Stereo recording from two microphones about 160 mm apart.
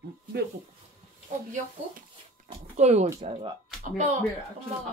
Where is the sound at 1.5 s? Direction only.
50° right (ahead or behind).